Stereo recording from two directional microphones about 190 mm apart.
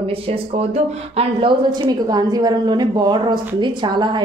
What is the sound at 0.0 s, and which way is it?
Speech, 30° right (ahead or behind).